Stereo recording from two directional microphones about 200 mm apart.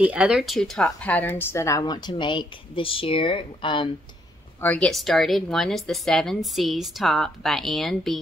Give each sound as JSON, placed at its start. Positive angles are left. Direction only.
{"t": 0.0, "sound": "a woman's voice", "side_deg": -5}
{"t": 4.6, "sound": "a woman's voice", "side_deg": 5}